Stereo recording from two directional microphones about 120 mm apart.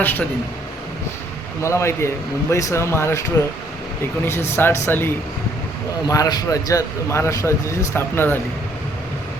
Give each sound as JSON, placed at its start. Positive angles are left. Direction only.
{"t": 0.0, "sound": "speech", "side_deg": 15}
{"t": 1.6, "sound": "speech", "side_deg": 25}
{"t": 6.1, "sound": "speech", "side_deg": 30}